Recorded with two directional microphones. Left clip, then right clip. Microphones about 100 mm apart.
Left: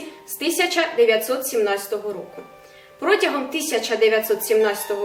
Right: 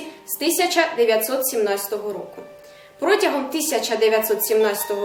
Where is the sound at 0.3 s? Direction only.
15° right (ahead or behind).